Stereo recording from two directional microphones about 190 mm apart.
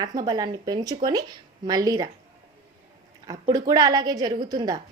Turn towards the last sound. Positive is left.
turn(degrees=-20)  # may be behind; listen again after turning